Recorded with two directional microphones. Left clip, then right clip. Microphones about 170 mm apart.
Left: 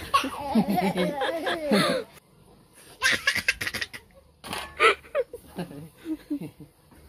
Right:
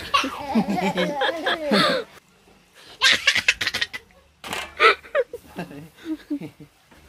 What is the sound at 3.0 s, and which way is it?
Snicker, 25° left (ahead or behind).